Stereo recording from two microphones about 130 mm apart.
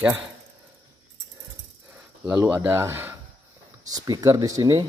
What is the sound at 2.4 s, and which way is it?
Speech, 15° right (ahead or behind).